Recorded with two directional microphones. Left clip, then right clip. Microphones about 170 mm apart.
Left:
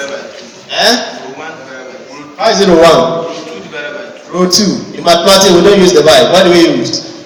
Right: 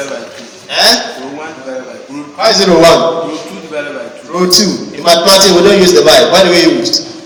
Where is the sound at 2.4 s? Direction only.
20° left (ahead or behind).